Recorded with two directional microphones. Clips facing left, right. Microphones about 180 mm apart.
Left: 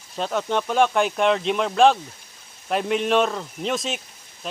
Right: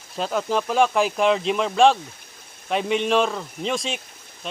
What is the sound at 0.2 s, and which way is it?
Speech, centre (ahead or behind).